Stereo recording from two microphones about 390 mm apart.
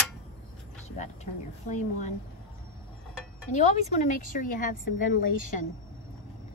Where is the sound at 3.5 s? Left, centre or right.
Centre.